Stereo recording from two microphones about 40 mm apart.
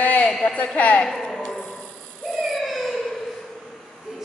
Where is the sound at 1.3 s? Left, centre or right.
Left.